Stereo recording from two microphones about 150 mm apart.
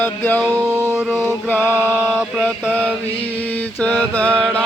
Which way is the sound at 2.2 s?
5° right (ahead or behind).